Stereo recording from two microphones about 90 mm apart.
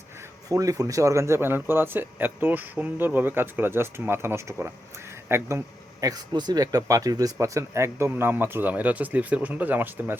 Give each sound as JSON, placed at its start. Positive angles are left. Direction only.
{"t": 0.2, "sound": "speech", "side_deg": -40}
{"t": 6.0, "sound": "speech", "side_deg": -45}